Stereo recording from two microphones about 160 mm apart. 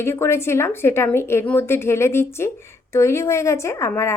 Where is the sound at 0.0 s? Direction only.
15° left (ahead or behind).